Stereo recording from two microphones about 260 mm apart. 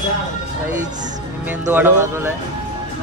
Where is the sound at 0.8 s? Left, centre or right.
Right.